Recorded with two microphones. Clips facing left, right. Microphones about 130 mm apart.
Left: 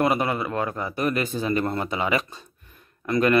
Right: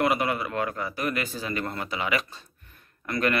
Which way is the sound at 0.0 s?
30° left (ahead or behind).